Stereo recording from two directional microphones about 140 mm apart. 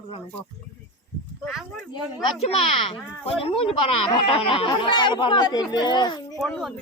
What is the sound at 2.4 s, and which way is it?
Speech, 45° left (ahead or behind).